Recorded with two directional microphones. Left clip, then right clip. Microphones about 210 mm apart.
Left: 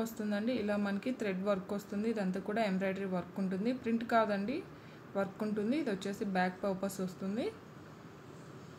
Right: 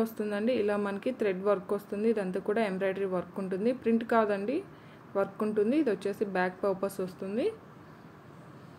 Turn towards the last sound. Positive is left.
turn(degrees=-15)  # may be behind; listen again after turning